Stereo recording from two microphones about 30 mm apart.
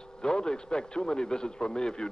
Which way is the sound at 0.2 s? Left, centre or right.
Left.